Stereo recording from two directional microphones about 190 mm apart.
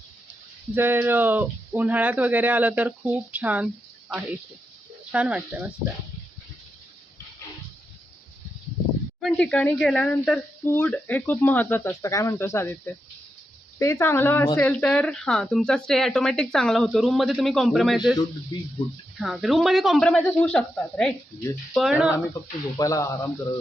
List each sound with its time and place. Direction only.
0.7 s speech: 10° right (ahead or behind)
5.1 s speech: 5° right (ahead or behind)
9.2 s speech: 5° left (ahead or behind)
19.2 s speech: centre (ahead or behind)
22.8 s speech: 15° left (ahead or behind)